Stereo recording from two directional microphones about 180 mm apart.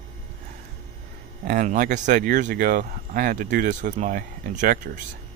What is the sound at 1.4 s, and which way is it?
Speech, 45° right (ahead or behind).